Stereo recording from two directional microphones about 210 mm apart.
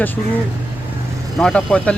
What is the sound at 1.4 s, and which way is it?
Speech, 5° left (ahead or behind).